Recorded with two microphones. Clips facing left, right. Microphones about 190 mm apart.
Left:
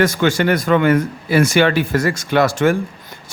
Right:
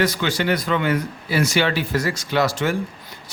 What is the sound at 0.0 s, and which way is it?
Speech, 50° left (ahead or behind).